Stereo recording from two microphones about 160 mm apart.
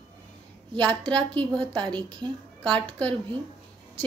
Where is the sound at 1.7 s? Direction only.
30° right (ahead or behind).